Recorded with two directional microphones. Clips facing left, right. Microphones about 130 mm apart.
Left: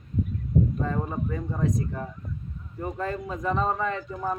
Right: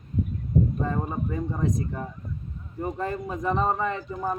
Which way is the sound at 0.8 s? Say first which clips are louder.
Right 1 dB; 20° right (ahead or behind).